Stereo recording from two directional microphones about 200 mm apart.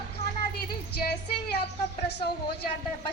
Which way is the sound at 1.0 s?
50° left (ahead or behind).